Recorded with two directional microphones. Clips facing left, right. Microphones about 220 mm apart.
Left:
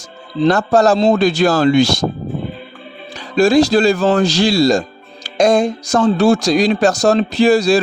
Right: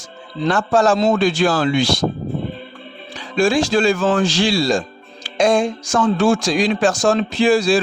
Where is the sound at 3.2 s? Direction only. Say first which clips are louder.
Left 5 dB; 40° left (ahead or behind).